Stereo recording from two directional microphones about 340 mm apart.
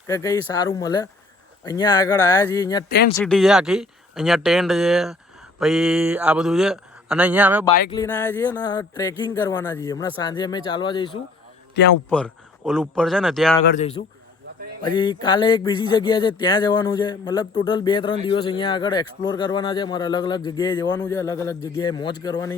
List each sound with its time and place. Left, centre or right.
0.1 s speech: centre
7.9 s speech: centre
11.8 s a man's voice: left
12.1 s speech: centre
13.7 s a man's voice: centre